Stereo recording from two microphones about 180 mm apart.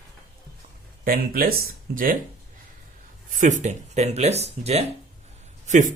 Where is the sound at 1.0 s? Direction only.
55° right (ahead or behind).